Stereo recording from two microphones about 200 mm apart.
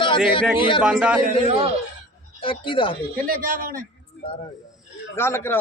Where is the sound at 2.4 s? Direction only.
25° left (ahead or behind).